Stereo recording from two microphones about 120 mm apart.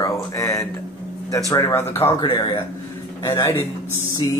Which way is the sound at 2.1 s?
40° left (ahead or behind).